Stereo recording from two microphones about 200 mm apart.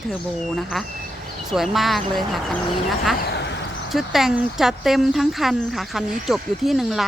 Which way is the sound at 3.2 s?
60° left (ahead or behind).